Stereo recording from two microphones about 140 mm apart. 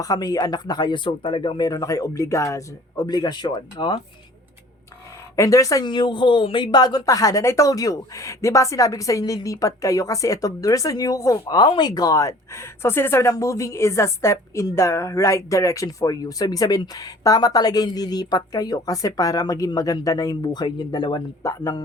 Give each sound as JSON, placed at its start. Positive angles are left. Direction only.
{"t": 0.0, "sound": "speech", "side_deg": 25}
{"t": 5.4, "sound": "speech", "side_deg": 20}